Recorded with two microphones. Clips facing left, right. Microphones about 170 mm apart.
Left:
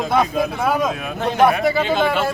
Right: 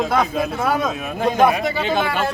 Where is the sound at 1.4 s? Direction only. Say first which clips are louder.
Left 3 dB; 15° right (ahead or behind).